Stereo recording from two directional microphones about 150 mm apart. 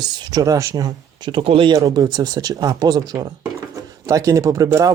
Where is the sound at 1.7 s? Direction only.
25° right (ahead or behind).